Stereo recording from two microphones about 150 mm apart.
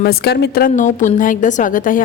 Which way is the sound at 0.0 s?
90° left.